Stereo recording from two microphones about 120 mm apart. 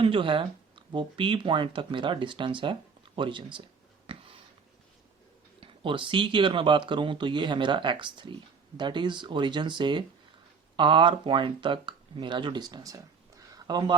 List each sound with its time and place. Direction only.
0.0 s speech: 45° right (ahead or behind)
4.0 s a sound: 50° right (ahead or behind)
5.5 s speech: 45° right (ahead or behind)